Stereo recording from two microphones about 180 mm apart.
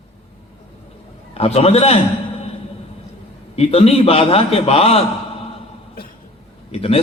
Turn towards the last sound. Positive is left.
turn(degrees=35)  # may be behind; listen again after turning